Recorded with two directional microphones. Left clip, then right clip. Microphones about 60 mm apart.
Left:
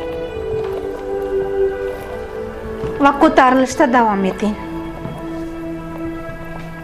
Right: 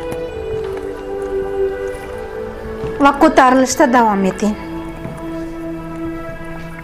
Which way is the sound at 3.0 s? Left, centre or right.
Right.